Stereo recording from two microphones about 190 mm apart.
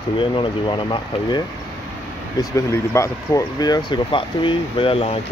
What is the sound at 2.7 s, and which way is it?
Speech, 15° left (ahead or behind).